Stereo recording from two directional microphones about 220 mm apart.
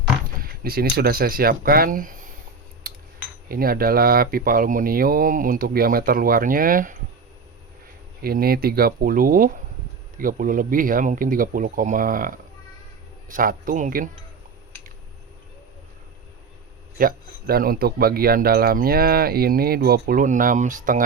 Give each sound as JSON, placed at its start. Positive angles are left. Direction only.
{"t": 0.4, "sound": "speech", "side_deg": -45}
{"t": 2.8, "sound": "cutlery", "side_deg": -40}
{"t": 3.5, "sound": "speech", "side_deg": -40}
{"t": 8.2, "sound": "speech", "side_deg": -45}
{"t": 17.0, "sound": "speech", "side_deg": -40}